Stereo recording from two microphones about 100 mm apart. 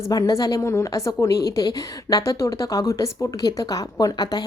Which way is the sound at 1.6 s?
40° left (ahead or behind).